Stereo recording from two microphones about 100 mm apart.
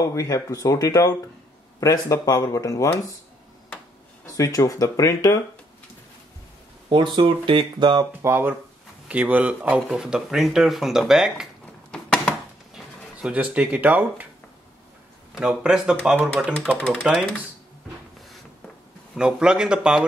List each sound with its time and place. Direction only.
0.0 s speech: 35° left (ahead or behind)
4.3 s speech: 35° left (ahead or behind)
6.9 s speech: 50° right (ahead or behind)
8.2 s speech: 25° right (ahead or behind); by 11.4 s 5° right (ahead or behind)
11.9 s a sound: 5° left (ahead or behind)
13.2 s speech: 15° right (ahead or behind)
15.3 s speech: 5° right (ahead or behind)
17.0 s speech: centre (ahead or behind)
19.1 s speech: 5° right (ahead or behind)